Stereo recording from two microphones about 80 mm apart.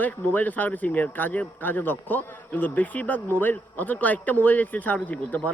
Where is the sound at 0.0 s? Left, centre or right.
Left.